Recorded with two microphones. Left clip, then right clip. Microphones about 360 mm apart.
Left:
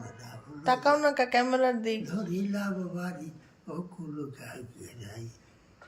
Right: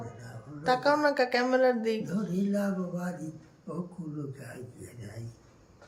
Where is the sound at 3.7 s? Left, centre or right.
Centre.